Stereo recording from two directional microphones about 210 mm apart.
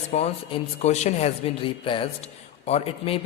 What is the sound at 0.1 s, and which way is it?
A man's voice, 30° left (ahead or behind).